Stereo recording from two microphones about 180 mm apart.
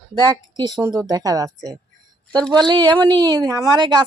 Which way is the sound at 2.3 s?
5° left (ahead or behind).